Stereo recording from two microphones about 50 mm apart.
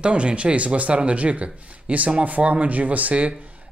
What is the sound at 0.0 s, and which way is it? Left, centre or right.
Speech, right.